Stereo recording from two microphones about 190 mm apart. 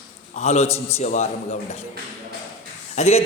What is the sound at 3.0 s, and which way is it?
Speech, 35° left (ahead or behind).